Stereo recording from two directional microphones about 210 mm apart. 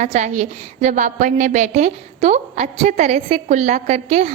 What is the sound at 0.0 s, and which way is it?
A woman's voice, 35° right (ahead or behind).